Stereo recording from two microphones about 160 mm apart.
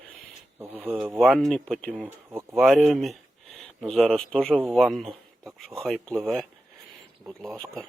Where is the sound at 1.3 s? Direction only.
Centre (ahead or behind).